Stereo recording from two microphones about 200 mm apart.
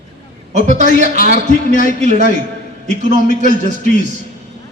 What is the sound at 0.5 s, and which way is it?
Speech, 35° right (ahead or behind).